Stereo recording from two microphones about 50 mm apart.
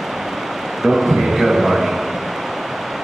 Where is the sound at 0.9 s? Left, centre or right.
Centre.